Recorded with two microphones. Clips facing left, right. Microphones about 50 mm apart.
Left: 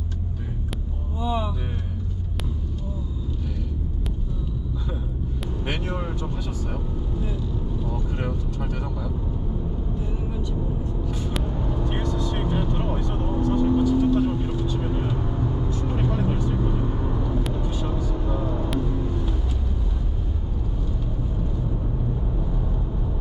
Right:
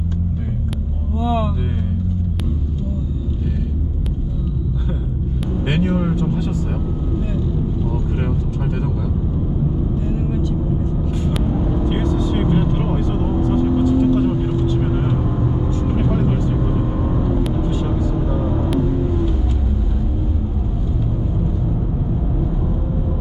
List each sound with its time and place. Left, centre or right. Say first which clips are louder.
1.2 s music: right 6 dB; centre
5.6 s speech: right 10 dB; centre
7.9 s vehicle: right 6 dB; right
11.4 s vehicle: right 8 dB; centre